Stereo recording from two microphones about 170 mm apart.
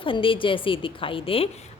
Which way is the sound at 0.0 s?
30° left (ahead or behind).